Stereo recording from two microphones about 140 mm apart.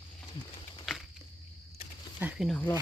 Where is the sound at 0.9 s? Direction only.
Centre (ahead or behind).